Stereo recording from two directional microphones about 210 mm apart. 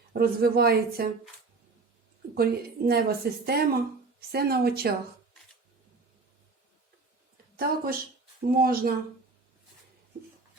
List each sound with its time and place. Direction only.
0.1 s speech: 45° right (ahead or behind)
2.3 s speech: 45° right (ahead or behind)
7.5 s speech: 45° right (ahead or behind)